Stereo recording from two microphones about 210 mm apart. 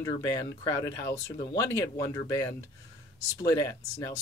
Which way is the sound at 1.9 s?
15° left (ahead or behind).